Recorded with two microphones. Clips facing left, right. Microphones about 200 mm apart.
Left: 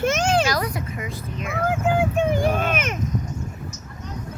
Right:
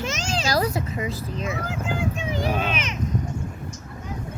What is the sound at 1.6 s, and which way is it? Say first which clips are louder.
Speech: left 6 dB; 55° left (ahead or behind).